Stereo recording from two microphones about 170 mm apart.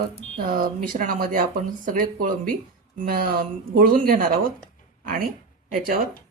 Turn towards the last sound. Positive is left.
turn(degrees=-55)  # may be behind; listen again after turning